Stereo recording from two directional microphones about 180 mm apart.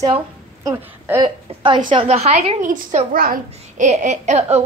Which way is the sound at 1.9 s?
30° right (ahead or behind).